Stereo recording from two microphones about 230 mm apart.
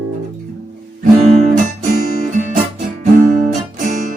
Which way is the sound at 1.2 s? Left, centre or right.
Right.